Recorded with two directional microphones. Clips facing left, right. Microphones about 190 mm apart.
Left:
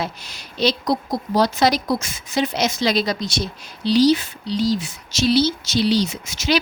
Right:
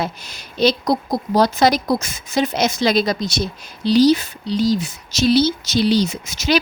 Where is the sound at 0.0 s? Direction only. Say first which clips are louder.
Right 3 dB; 50° right (ahead or behind).